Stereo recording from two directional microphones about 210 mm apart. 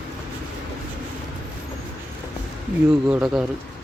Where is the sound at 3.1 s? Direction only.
5° right (ahead or behind).